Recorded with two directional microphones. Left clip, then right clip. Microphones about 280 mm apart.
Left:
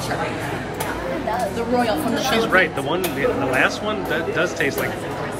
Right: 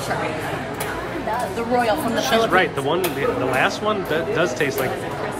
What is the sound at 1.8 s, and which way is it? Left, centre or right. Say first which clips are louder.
A man's voice: right 1 dB; centre.